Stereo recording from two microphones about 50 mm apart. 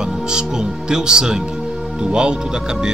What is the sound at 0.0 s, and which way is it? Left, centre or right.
A man's voice, centre.